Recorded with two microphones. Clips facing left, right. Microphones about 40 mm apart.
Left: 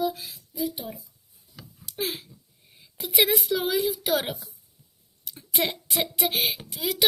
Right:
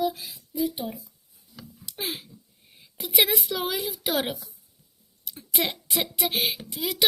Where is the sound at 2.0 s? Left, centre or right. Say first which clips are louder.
Left 2 dB; centre.